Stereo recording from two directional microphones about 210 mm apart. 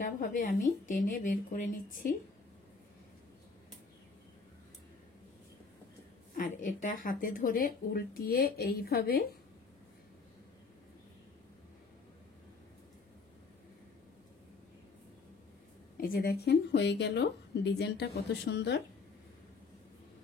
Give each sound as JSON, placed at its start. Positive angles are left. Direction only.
{"t": 0.0, "sound": "a woman's voice", "side_deg": 40}
{"t": 6.3, "sound": "speech", "side_deg": 40}
{"t": 16.0, "sound": "speech", "side_deg": 45}